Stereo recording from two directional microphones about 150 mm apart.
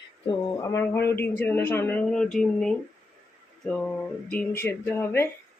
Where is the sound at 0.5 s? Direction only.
20° left (ahead or behind).